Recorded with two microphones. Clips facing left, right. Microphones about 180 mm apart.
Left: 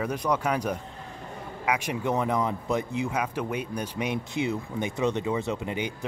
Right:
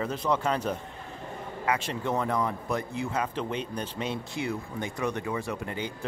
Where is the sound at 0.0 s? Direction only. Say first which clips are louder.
Left 1 dB; 15° left (ahead or behind).